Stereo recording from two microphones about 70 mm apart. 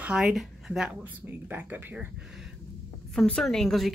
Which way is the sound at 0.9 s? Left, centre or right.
Right.